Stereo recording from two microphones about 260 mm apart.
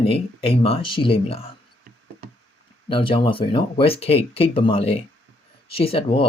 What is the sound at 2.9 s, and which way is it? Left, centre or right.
Speech, centre.